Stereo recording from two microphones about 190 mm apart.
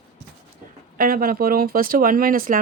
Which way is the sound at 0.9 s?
50° right (ahead or behind).